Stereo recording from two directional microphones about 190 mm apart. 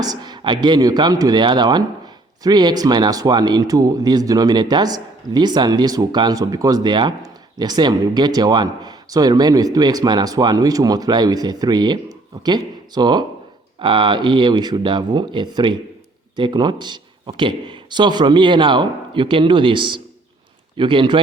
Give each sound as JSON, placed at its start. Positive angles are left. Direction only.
{"t": 0.0, "sound": "speech", "side_deg": -20}